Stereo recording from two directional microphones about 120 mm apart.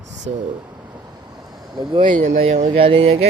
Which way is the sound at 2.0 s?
90° right.